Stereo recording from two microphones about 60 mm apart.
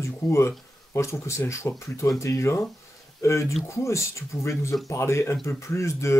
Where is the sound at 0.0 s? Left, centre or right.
Left.